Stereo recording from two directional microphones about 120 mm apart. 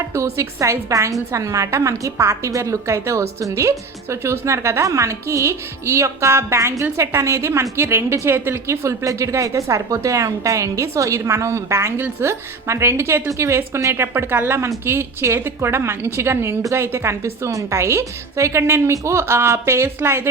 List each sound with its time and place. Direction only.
0.0 s a woman's voice: 25° right (ahead or behind)